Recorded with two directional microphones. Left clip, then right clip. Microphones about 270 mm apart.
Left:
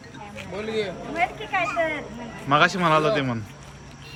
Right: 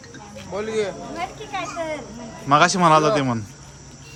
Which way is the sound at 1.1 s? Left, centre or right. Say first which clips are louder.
Left 4 dB; centre.